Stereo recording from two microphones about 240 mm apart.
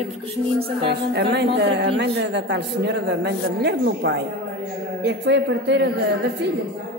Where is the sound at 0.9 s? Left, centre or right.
Right.